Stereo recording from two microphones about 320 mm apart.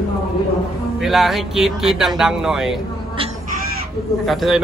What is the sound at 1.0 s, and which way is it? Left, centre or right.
Speech, centre.